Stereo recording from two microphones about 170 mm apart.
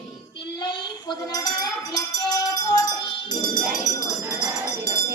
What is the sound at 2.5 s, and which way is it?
Tambourine, 20° left (ahead or behind).